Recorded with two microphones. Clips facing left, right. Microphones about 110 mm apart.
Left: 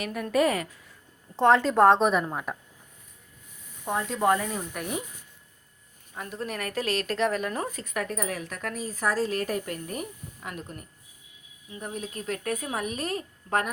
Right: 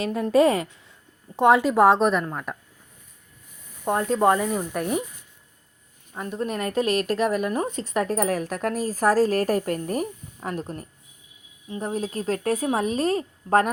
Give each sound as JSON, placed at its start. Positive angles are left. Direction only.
{"t": 0.0, "sound": "a woman's voice", "side_deg": -30}
{"t": 1.4, "sound": "a woman's voice", "side_deg": -10}
{"t": 3.8, "sound": "speech", "side_deg": -45}
{"t": 4.4, "sound": "a woman's voice", "side_deg": -20}
{"t": 6.1, "sound": "a woman's voice", "side_deg": -20}